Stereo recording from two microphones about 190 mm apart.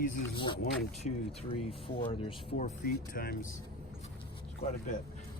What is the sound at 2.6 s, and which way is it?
Speech, 45° left (ahead or behind).